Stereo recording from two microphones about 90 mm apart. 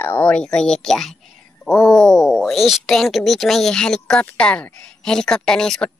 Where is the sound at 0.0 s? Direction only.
20° left (ahead or behind).